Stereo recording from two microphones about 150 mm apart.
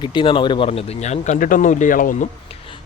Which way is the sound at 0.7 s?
50° left (ahead or behind).